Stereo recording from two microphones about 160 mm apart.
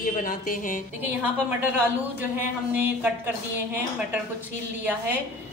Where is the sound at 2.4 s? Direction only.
10° right (ahead or behind).